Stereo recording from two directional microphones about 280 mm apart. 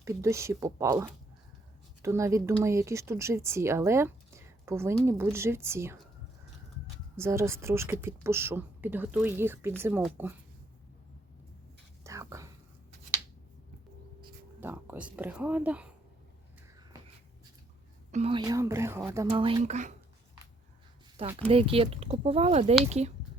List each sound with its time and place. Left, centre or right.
0.0 s speech: centre
7.2 s speech: centre
12.0 s whispering: centre
14.6 s speech: centre
18.1 s speech: right
21.2 s speech: centre